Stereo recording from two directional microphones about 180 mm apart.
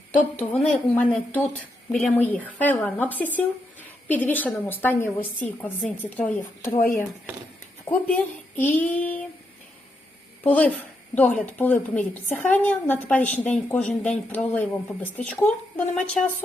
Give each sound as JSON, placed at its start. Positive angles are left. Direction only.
{"t": 0.5, "sound": "a woman's voice", "side_deg": 5}
{"t": 6.7, "sound": "speech", "side_deg": 50}
{"t": 8.0, "sound": "a woman's voice", "side_deg": 10}
{"t": 10.4, "sound": "a woman's voice", "side_deg": 10}